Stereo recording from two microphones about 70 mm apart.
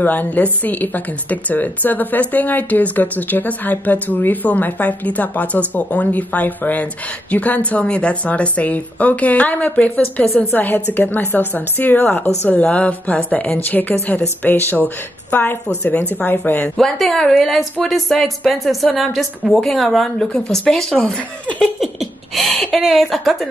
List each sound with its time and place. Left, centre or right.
0.0 s speech: left
16.7 s a woman's voice: centre
21.7 s a woman's voice: centre